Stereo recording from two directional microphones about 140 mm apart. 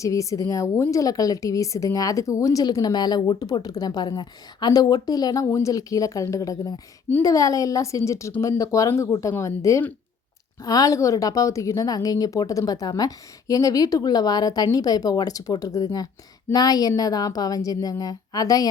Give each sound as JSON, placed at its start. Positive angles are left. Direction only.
{"t": 0.0, "sound": "a woman's voice", "side_deg": 25}